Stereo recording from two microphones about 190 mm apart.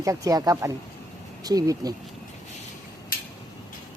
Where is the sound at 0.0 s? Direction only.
15° right (ahead or behind).